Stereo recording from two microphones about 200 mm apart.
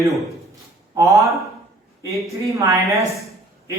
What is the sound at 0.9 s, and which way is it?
Speech, 15° right (ahead or behind).